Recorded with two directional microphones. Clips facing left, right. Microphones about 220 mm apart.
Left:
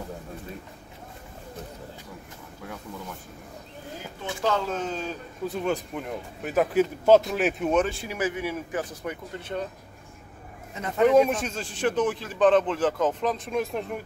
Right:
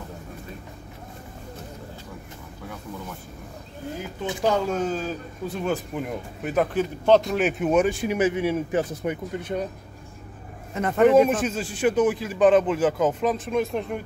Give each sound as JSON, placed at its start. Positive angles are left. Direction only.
{"t": 4.3, "sound": "speech", "side_deg": -15}
{"t": 10.7, "sound": "speech", "side_deg": -55}
{"t": 11.1, "sound": "speech", "side_deg": -5}